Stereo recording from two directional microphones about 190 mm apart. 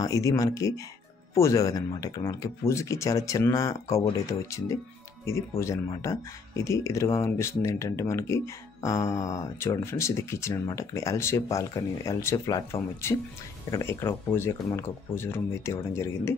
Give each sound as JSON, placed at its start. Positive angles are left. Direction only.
{"t": 0.0, "sound": "speech", "side_deg": 15}